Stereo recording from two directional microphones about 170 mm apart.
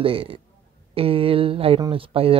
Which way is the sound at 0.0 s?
35° right (ahead or behind).